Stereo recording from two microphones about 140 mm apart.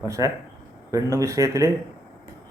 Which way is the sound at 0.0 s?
20° right (ahead or behind).